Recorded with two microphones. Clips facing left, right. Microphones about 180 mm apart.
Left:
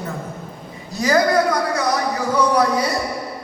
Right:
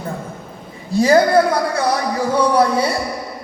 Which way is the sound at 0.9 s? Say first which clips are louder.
Right 4 dB; 30° right (ahead or behind).